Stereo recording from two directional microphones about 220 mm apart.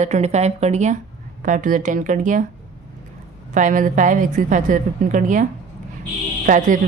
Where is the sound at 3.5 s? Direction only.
35° right (ahead or behind).